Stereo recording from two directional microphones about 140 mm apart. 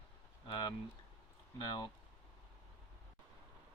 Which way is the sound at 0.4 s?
35° left (ahead or behind).